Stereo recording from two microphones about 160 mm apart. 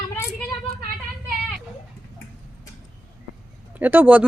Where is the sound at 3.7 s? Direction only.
10° right (ahead or behind).